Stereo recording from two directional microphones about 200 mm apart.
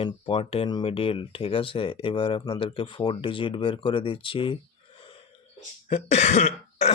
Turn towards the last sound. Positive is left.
turn(degrees=35)  # may be behind; listen again after turning